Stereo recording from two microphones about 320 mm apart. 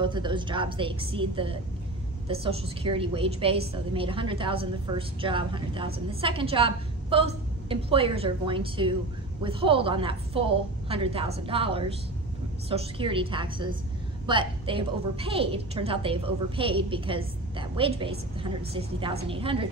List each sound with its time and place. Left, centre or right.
0.0 s a woman's voice: centre